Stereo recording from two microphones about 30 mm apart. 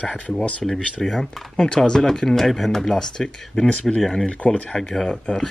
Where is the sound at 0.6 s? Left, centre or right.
Centre.